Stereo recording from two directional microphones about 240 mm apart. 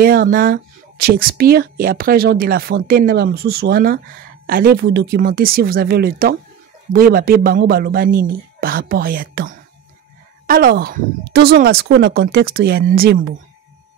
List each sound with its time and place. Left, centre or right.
0.0 s speech: right